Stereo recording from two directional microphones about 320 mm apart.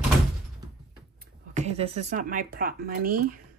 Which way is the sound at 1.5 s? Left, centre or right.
Centre.